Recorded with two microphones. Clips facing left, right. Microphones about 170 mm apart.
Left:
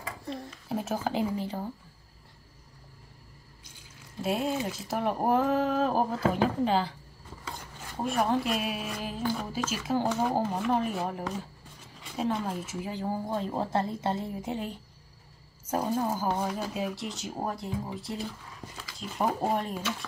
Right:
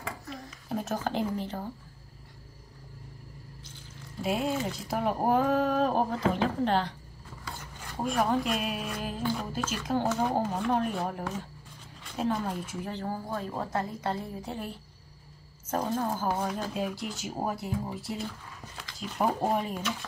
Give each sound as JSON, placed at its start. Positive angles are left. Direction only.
{"t": 0.7, "sound": "speech", "side_deg": 5}
{"t": 4.2, "sound": "speech", "side_deg": 0}
{"t": 8.0, "sound": "speech", "side_deg": 0}
{"t": 13.3, "sound": "a woman's voice", "side_deg": 25}